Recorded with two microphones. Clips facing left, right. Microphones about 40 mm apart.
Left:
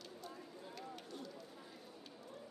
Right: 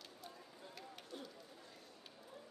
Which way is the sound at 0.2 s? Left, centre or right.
Centre.